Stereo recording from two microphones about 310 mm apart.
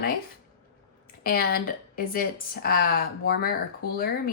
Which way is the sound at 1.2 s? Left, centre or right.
Left.